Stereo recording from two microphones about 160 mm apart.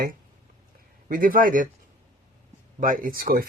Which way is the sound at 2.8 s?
60° right (ahead or behind).